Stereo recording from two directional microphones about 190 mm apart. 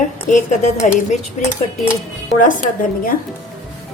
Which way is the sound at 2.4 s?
45° left (ahead or behind).